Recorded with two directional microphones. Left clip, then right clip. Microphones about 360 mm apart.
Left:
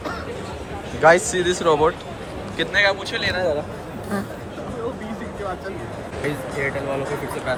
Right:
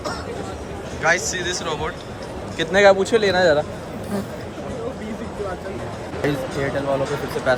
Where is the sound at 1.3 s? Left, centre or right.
Centre.